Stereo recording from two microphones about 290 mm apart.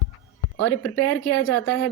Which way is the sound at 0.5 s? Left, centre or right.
Left.